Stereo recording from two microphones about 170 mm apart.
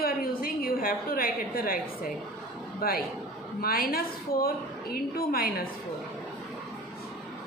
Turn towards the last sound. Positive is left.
turn(degrees=60)  # may be behind; listen again after turning